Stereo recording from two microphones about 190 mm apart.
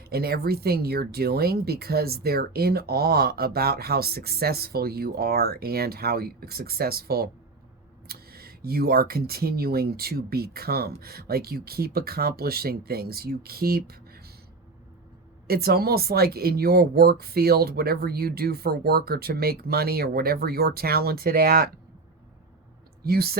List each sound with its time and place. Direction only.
0.0 s speech: 55° right (ahead or behind)
15.4 s speech: 55° right (ahead or behind)
23.0 s speech: 55° right (ahead or behind)